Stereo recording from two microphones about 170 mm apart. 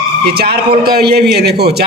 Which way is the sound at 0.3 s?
65° right (ahead or behind).